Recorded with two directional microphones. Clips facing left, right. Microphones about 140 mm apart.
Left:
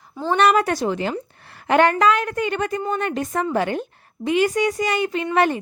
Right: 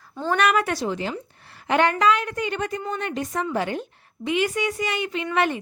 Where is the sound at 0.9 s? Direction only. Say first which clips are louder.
Left 4 dB; 60° left (ahead or behind).